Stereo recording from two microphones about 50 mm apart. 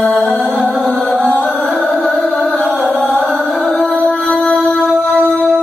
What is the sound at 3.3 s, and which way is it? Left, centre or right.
Music, centre.